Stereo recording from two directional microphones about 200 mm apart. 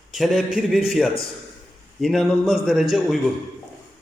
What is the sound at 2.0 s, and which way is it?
A man's voice, centre (ahead or behind).